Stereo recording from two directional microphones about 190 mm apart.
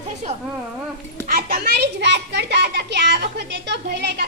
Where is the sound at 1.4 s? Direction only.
50° right (ahead or behind).